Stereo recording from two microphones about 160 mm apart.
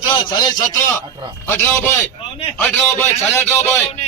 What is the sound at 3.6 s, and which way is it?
Speech, 45° left (ahead or behind).